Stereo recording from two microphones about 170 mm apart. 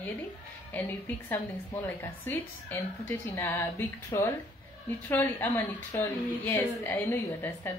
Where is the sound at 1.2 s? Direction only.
10° left (ahead or behind).